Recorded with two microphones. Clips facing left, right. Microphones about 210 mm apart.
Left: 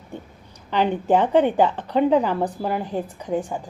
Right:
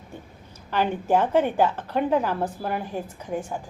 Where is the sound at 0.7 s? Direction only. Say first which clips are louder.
Left 3 dB; 20° left (ahead or behind).